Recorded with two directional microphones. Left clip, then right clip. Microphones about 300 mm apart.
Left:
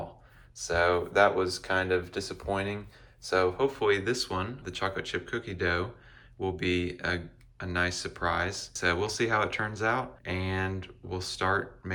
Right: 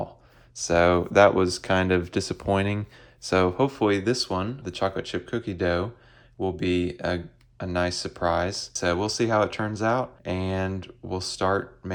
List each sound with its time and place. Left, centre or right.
0.5 s speech: right